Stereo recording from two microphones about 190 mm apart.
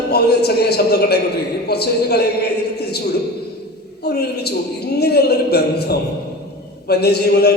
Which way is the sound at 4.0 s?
60° left (ahead or behind).